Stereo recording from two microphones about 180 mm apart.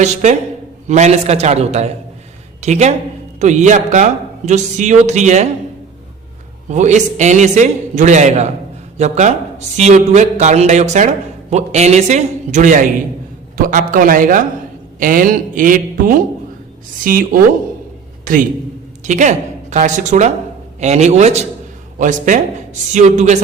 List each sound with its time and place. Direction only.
0.0 s a man's voice: 40° right (ahead or behind)
6.7 s a man's voice: 40° right (ahead or behind)
19.0 s a woman's voice: 45° right (ahead or behind)